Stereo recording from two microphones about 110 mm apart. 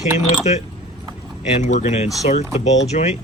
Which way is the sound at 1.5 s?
90° left.